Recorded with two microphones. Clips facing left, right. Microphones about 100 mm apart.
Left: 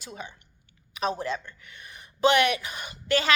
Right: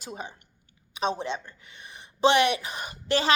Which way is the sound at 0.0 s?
40° right (ahead or behind).